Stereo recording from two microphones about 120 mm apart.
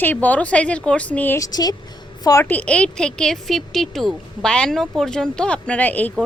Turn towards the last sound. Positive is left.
turn(degrees=15)  # may be behind; listen again after turning